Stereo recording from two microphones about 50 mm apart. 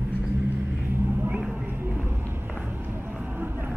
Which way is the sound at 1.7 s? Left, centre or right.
Right.